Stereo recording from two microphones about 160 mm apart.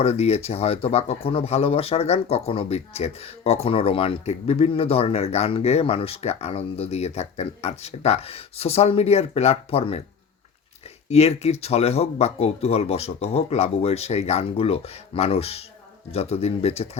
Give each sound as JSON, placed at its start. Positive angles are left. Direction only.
{"t": 0.0, "sound": "speech", "side_deg": 40}
{"t": 11.1, "sound": "speech", "side_deg": 40}